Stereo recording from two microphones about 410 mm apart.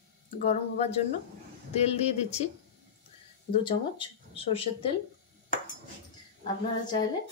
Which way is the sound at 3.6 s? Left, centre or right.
Centre.